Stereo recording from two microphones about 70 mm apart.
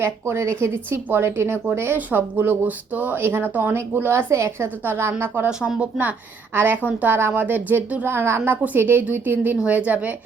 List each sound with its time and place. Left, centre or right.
0.0 s speech: right
5.5 s speech: centre
6.5 s a woman's voice: right